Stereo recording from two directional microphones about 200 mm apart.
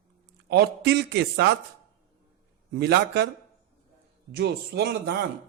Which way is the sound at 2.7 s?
55° right (ahead or behind).